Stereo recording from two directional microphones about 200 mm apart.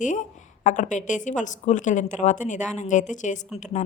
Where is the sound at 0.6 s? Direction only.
40° left (ahead or behind).